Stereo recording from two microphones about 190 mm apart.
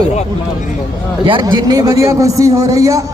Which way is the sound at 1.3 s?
25° right (ahead or behind).